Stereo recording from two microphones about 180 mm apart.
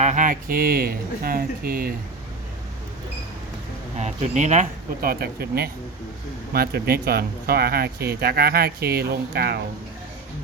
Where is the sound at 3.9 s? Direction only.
40° right (ahead or behind).